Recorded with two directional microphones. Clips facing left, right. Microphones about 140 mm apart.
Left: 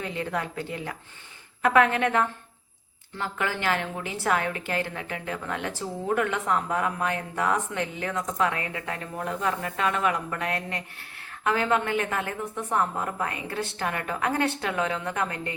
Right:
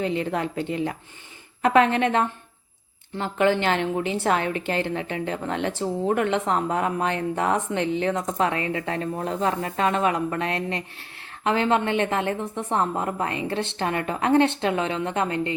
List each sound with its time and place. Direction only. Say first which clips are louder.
0.0 s a woman's voice: right 5 dB; 20° right (ahead or behind)